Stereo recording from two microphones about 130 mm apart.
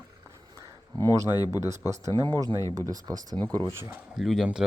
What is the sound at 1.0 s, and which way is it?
Speech, 25° right (ahead or behind).